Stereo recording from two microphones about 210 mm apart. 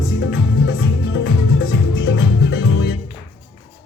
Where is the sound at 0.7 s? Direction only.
60° left (ahead or behind).